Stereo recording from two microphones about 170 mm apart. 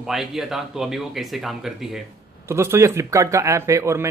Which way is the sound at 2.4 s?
15° right (ahead or behind).